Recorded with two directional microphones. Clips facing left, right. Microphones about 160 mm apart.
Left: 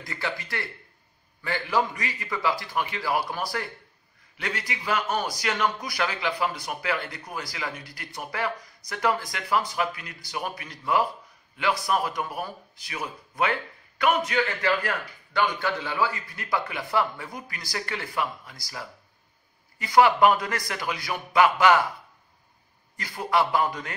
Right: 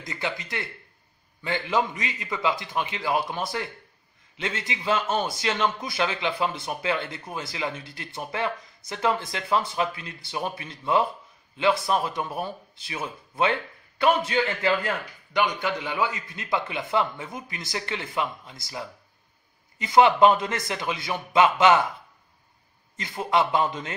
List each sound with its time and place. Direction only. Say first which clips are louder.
0.0 s a man's voice: right 1 dB; 20° right (ahead or behind)
22.9 s a man's voice: right 1 dB; 20° right (ahead or behind)